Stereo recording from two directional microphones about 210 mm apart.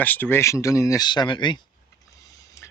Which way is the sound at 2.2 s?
15° left (ahead or behind).